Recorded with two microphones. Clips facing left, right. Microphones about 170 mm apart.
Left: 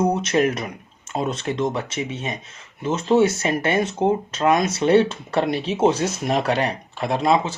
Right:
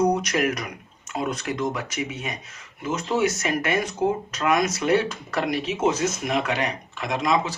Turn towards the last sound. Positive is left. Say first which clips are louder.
# left 4 dB
turn(degrees=30)  # may be behind; listen again after turning